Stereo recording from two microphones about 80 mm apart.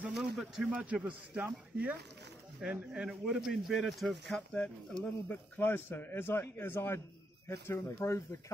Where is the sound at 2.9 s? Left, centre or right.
Centre.